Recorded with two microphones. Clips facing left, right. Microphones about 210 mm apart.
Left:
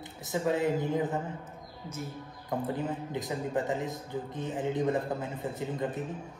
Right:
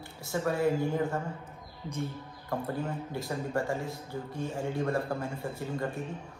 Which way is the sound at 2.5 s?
20° left (ahead or behind).